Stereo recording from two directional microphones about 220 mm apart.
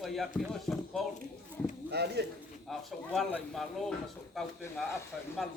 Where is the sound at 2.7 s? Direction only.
Centre (ahead or behind).